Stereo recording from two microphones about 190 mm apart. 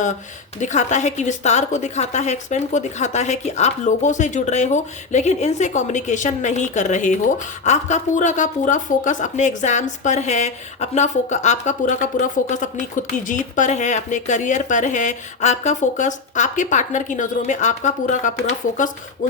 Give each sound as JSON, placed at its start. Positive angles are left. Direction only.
{"t": 0.6, "sound": "a woman's voice", "side_deg": 40}